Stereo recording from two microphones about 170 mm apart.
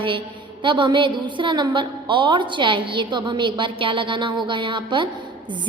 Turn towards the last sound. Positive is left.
turn(degrees=-30)  # may be behind; listen again after turning